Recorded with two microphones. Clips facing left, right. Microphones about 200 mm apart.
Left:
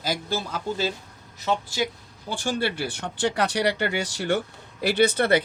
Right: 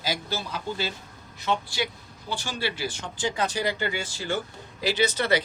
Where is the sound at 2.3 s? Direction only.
50° left (ahead or behind).